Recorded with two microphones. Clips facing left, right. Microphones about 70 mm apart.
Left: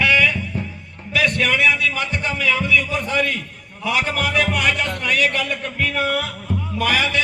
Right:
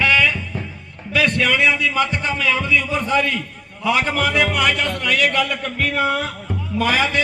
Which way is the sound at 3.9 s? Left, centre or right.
Right.